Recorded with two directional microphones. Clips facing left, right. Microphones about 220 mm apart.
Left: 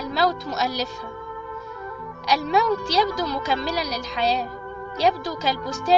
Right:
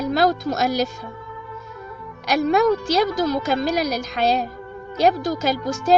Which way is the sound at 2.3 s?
50° right (ahead or behind).